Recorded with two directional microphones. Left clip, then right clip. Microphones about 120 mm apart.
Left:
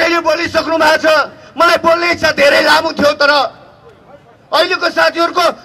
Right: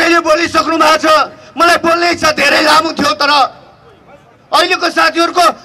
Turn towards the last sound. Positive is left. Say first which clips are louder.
# right 2 dB
turn(degrees=-15)  # may be behind; listen again after turning